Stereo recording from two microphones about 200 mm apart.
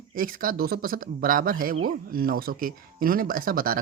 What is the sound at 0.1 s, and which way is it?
Speech, 45° right (ahead or behind).